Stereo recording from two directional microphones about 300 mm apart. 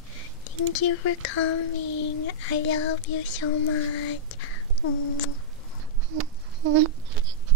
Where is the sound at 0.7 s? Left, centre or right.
Left.